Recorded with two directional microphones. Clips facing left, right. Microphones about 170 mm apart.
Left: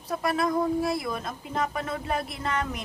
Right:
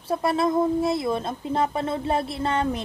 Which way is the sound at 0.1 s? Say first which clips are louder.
Right 4 dB; 25° right (ahead or behind).